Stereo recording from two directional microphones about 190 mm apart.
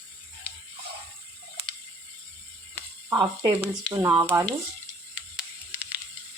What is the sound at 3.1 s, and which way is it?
Speech, 15° right (ahead or behind).